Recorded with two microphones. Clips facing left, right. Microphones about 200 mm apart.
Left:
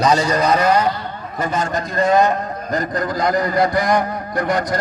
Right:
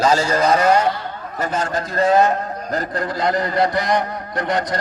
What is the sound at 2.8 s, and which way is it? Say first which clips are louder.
A man's voice: left 2 dB; 25° right (ahead or behind).